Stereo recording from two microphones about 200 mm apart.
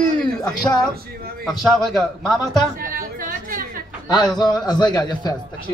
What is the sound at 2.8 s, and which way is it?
Chatter, 45° right (ahead or behind).